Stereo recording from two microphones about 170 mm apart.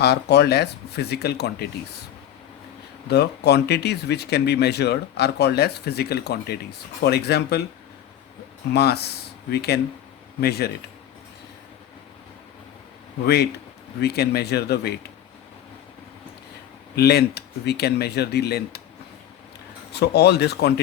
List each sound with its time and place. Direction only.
0.0 s speech: 80° left
3.1 s speech: 75° left (ahead or behind)
8.7 s speech: 75° left (ahead or behind)
13.2 s speech: 70° left (ahead or behind)
16.9 s speech: 70° left (ahead or behind)
19.9 s speech: 75° left (ahead or behind)